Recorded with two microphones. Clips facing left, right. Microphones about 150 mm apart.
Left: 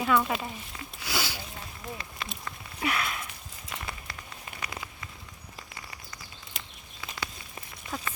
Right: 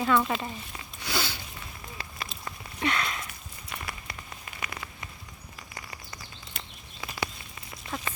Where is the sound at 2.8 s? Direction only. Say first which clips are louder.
Right 1 dB; 5° left (ahead or behind).